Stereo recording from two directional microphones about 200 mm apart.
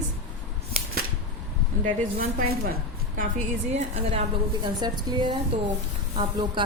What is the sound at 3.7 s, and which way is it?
A woman's voice, 35° right (ahead or behind).